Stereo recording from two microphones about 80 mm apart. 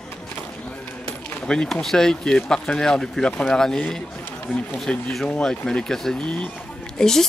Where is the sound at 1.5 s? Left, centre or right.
Centre.